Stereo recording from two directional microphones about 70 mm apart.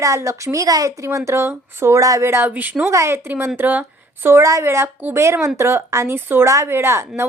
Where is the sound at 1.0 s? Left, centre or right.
Right.